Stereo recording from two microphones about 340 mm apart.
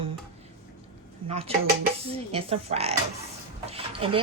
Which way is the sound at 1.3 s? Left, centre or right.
Centre.